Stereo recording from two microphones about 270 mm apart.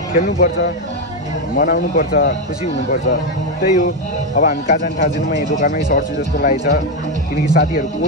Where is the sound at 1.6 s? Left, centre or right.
Left.